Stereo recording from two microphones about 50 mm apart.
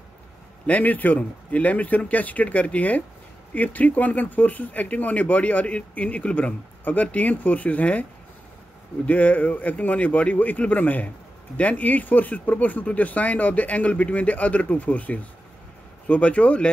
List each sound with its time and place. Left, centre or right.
0.7 s speech: left